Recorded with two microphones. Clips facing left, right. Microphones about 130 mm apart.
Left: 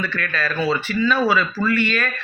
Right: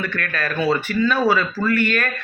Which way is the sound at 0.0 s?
55° right (ahead or behind).